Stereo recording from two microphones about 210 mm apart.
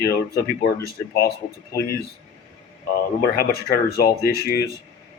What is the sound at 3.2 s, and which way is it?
Speech, 45° left (ahead or behind).